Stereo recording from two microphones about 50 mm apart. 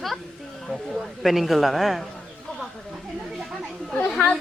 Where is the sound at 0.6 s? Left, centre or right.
Centre.